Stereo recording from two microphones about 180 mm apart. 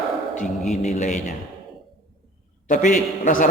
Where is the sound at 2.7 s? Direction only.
40° left (ahead or behind).